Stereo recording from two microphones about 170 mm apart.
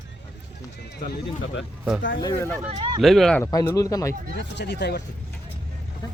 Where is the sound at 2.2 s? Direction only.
20° left (ahead or behind).